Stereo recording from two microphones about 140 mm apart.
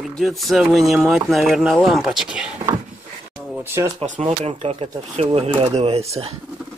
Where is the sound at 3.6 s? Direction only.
20° right (ahead or behind).